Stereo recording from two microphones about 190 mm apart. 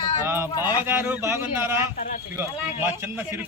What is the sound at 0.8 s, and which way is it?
A man's voice, 10° right (ahead or behind).